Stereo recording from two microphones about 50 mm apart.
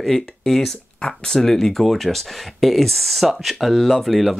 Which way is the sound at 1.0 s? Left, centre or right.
Centre.